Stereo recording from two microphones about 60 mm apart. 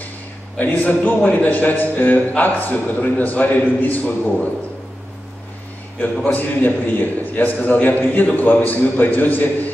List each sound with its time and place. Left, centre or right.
0.6 s a man's voice: left
6.2 s a man's voice: left